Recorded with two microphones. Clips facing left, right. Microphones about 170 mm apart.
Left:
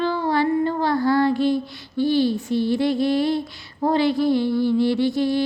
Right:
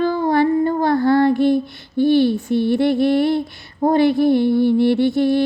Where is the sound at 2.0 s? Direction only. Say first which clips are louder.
Right 5 dB; 60° right (ahead or behind).